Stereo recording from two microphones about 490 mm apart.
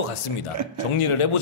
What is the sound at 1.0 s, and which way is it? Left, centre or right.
Speech, left.